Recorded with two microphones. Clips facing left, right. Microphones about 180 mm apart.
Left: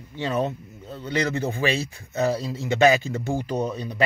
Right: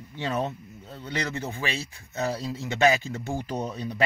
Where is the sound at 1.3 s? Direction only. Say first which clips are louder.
Left 7 dB; 45° left (ahead or behind).